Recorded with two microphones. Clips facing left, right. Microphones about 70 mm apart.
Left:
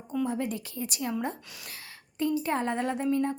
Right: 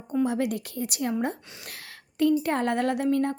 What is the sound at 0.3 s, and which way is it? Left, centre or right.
A woman's voice, right.